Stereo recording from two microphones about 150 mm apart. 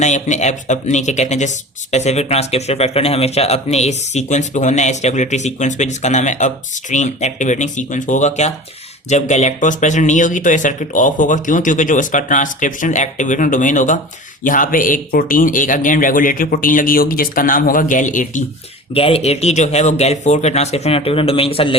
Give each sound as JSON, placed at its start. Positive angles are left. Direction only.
{"t": 0.0, "sound": "speech", "side_deg": 50}
{"t": 18.9, "sound": "speech", "side_deg": 40}